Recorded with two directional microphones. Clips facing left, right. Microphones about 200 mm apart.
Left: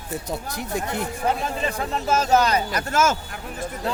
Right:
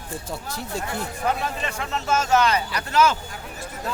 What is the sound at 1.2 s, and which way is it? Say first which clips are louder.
Speech: left 1 dB; 35° left (ahead or behind).